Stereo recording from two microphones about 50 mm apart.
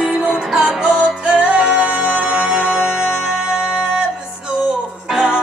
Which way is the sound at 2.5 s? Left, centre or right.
Centre.